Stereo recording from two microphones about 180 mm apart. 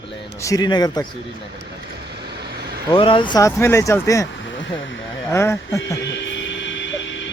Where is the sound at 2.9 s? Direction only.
30° left (ahead or behind).